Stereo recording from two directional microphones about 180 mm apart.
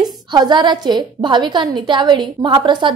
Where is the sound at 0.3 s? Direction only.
25° right (ahead or behind).